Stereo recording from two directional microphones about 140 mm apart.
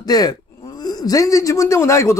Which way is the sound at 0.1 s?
30° left (ahead or behind).